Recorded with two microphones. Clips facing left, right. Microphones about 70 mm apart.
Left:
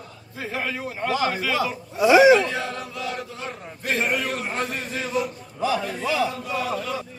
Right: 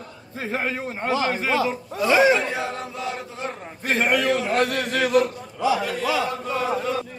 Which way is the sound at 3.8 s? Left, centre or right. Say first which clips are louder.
Right 2 dB; right.